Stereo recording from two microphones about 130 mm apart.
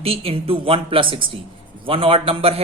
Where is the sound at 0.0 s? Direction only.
50° right (ahead or behind).